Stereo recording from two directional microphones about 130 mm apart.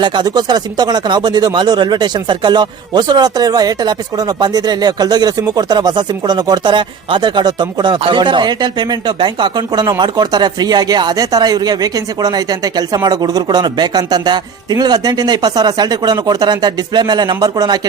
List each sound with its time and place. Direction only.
0.0 s speech: 35° right (ahead or behind)